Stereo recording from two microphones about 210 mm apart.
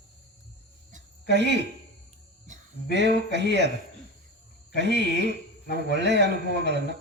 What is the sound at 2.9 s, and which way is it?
Speech, 55° right (ahead or behind).